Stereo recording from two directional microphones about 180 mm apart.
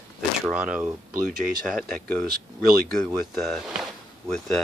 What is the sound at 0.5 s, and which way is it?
Speech, 5° right (ahead or behind).